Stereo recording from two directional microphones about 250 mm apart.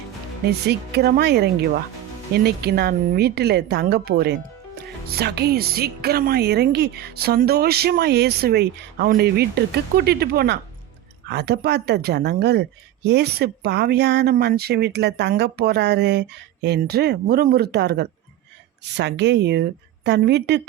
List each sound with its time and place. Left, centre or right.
0.7 s a woman's voice: right